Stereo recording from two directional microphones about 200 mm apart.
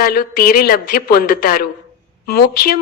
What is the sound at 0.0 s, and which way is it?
Speech, 50° left (ahead or behind).